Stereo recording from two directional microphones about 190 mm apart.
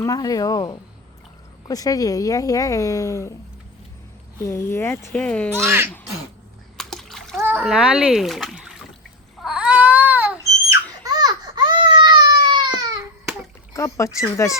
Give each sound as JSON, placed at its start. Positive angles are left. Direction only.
{"t": 0.0, "sound": "speech", "side_deg": 20}
{"t": 4.4, "sound": "speech", "side_deg": 15}
{"t": 5.6, "sound": "speech", "side_deg": -10}
{"t": 6.7, "sound": "splash", "side_deg": 0}
{"t": 7.4, "sound": "a child's voice", "side_deg": -10}
{"t": 9.4, "sound": "a sound", "side_deg": -5}
{"t": 11.0, "sound": "baby cry", "side_deg": -20}
{"t": 13.7, "sound": "speech", "side_deg": 15}